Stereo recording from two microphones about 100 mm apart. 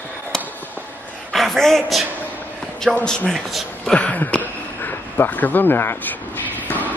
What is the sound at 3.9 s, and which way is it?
Speech, 15° left (ahead or behind).